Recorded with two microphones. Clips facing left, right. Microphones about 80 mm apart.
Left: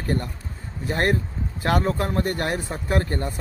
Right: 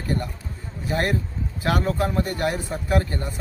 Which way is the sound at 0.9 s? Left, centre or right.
Left.